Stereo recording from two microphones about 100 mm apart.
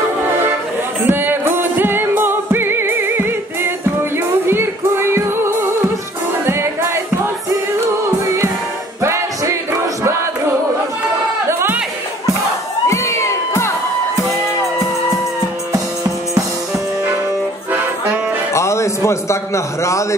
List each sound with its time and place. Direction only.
1.0 s music: 20° right (ahead or behind)
9.0 s music: 30° right (ahead or behind)
12.8 s crowd: 30° left (ahead or behind)
18.5 s music: 30° left (ahead or behind)